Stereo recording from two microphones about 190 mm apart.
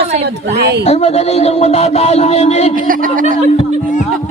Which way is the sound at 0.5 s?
60° right (ahead or behind).